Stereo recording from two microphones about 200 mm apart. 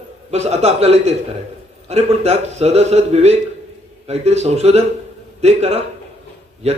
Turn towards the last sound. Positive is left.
turn(degrees=-30)  # may be behind; listen again after turning